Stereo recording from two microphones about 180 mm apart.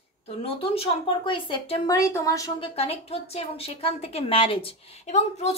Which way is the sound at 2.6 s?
35° left (ahead or behind).